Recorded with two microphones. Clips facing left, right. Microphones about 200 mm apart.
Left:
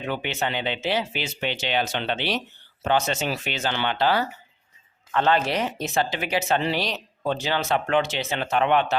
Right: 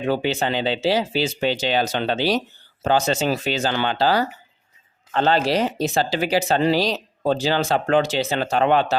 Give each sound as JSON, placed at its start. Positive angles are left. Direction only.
{"t": 0.1, "sound": "speech", "side_deg": -35}